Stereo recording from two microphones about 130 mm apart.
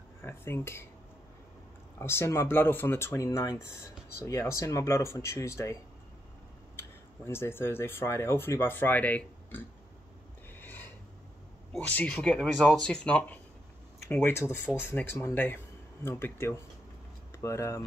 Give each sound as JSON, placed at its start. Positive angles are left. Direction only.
{"t": 0.2, "sound": "speech", "side_deg": 20}
{"t": 2.0, "sound": "speech", "side_deg": 20}
{"t": 6.8, "sound": "speech", "side_deg": 20}
{"t": 10.5, "sound": "filing", "side_deg": 15}
{"t": 11.7, "sound": "speech", "side_deg": 10}